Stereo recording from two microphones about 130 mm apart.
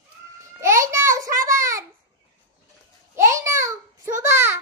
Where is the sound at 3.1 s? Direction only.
20° right (ahead or behind).